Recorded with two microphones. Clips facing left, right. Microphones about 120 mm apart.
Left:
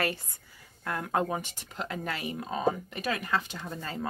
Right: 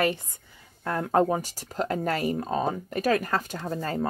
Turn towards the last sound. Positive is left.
turn(degrees=-45)  # may be behind; listen again after turning